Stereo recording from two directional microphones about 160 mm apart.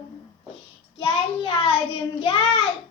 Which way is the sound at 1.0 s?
35° left (ahead or behind).